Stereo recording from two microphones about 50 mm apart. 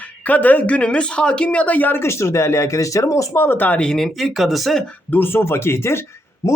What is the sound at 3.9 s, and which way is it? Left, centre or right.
Speech, centre.